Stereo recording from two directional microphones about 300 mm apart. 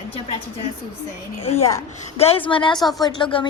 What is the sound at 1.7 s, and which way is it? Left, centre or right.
A woman's voice, centre.